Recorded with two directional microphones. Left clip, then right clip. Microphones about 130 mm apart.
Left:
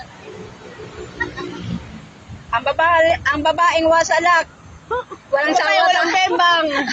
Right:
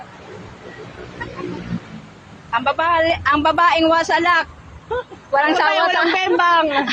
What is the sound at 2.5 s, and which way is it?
Speech, 30° right (ahead or behind).